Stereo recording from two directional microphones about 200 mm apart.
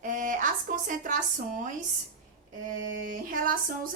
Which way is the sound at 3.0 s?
45° right (ahead or behind).